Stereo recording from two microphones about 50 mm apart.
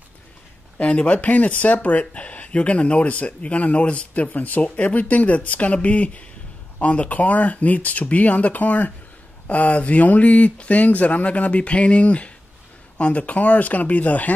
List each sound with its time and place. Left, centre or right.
0.7 s speech: left